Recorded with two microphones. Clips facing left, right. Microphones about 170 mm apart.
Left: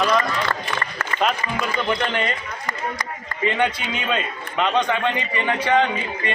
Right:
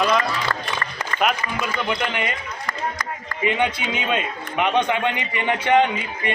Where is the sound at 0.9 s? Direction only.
15° right (ahead or behind).